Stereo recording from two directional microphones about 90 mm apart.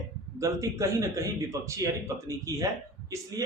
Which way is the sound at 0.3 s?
35° right (ahead or behind).